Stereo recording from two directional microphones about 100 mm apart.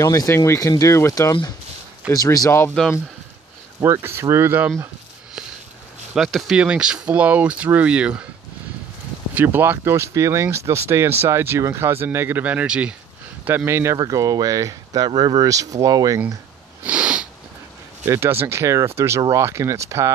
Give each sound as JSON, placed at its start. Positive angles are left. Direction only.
{"t": 0.0, "sound": "speech", "side_deg": 30}
{"t": 3.8, "sound": "speech", "side_deg": -25}
{"t": 6.1, "sound": "speech", "side_deg": -5}
{"t": 9.3, "sound": "speech", "side_deg": -20}
{"t": 13.7, "sound": "speech", "side_deg": -25}
{"t": 13.9, "sound": "speech", "side_deg": -35}
{"t": 16.8, "sound": "snort", "side_deg": -10}
{"t": 18.0, "sound": "speech", "side_deg": -25}